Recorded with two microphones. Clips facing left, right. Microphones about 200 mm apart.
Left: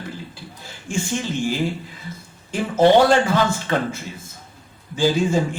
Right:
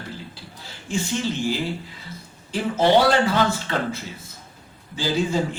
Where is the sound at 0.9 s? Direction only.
50° left (ahead or behind).